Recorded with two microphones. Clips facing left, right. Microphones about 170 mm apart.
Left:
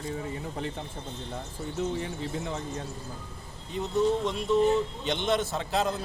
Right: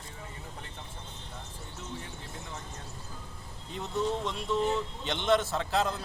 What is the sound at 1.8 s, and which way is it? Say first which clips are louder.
Speech: left 12 dB; 90° left.